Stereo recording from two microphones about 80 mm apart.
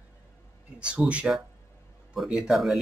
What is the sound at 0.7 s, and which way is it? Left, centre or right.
Speech, centre.